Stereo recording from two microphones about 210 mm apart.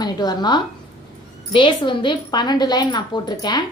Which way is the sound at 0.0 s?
20° left (ahead or behind).